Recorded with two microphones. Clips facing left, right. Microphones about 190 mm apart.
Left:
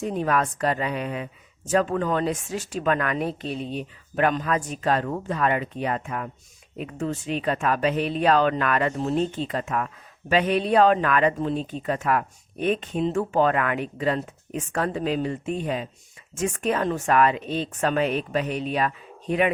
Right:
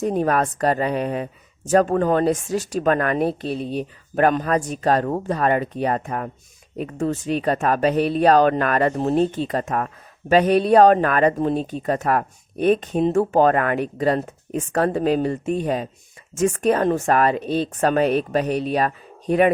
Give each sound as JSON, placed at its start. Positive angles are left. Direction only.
{"t": 0.0, "sound": "speech", "side_deg": -40}